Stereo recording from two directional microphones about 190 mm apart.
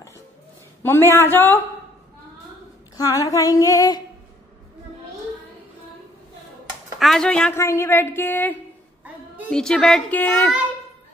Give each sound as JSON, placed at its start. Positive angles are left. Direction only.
{"t": 0.8, "sound": "female singing", "side_deg": 10}
{"t": 3.0, "sound": "female singing", "side_deg": 20}
{"t": 7.0, "sound": "speech", "side_deg": 0}
{"t": 7.6, "sound": "female singing", "side_deg": 15}
{"t": 9.5, "sound": "speech", "side_deg": 5}